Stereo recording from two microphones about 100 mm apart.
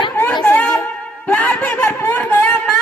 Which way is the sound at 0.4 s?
15° left (ahead or behind).